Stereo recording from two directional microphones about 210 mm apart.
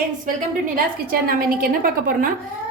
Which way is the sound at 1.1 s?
45° right (ahead or behind).